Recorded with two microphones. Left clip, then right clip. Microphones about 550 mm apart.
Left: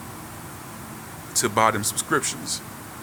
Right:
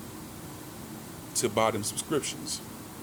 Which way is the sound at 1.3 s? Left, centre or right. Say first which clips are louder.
Left 6 dB; right.